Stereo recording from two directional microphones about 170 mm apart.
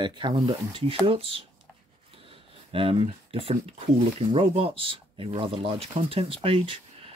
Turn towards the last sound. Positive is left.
turn(degrees=-35)  # may be behind; listen again after turning